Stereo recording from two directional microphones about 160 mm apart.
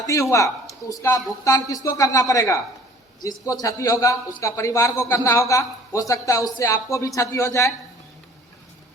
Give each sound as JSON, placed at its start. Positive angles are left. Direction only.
{"t": 0.1, "sound": "a man's voice", "side_deg": 20}